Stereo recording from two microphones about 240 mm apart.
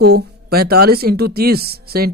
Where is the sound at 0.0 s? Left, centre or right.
Right.